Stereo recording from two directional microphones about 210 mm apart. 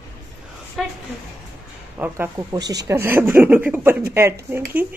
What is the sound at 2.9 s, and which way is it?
Speech, 10° right (ahead or behind).